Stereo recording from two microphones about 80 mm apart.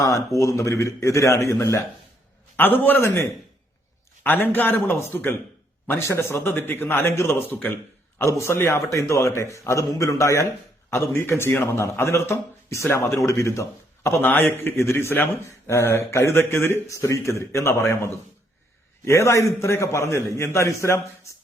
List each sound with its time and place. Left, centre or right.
0.3 s a man's voice: left
2.6 s a man's voice: left
10.9 s a man's voice: left
14.2 s a man's voice: left